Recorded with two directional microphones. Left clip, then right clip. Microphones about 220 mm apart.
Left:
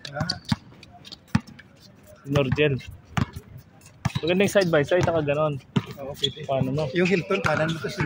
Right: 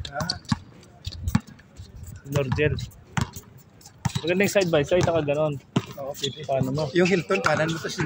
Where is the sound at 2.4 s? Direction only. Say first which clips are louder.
Left 1 dB; 20° left (ahead or behind).